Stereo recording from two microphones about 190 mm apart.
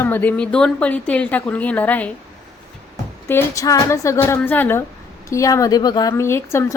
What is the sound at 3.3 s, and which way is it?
Speech, 15° left (ahead or behind).